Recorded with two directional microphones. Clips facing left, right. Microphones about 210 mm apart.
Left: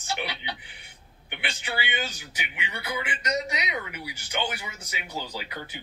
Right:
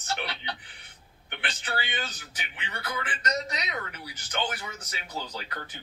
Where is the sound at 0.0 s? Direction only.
10° left (ahead or behind).